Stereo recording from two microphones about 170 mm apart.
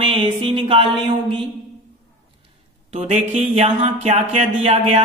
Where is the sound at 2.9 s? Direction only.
35° right (ahead or behind).